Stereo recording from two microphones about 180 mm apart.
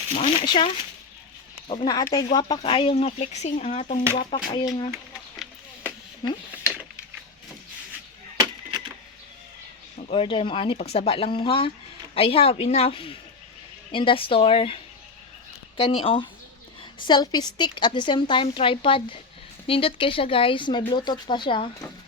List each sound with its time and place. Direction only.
0.4 s a woman's voice: 30° left (ahead or behind)
4.6 s a woman's voice: 20° left (ahead or behind)
6.2 s a woman's voice: 25° left (ahead or behind)
8.4 s a sound: 25° right (ahead or behind)
10.1 s speech: 30° left (ahead or behind)
15.8 s a woman's voice: 30° left (ahead or behind)